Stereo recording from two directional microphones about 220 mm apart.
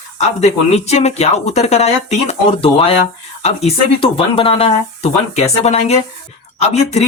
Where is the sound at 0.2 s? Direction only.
30° left (ahead or behind).